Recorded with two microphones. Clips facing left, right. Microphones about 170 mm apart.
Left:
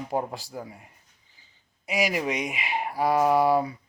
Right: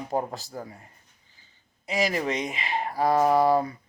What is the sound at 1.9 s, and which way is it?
A man's voice, 10° left (ahead or behind).